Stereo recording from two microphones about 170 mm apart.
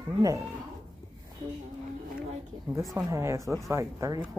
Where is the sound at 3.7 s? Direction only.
15° right (ahead or behind).